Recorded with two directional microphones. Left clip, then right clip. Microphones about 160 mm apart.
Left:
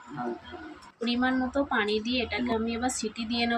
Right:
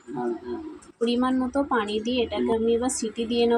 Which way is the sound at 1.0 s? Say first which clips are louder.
Right 4 dB; 20° right (ahead or behind).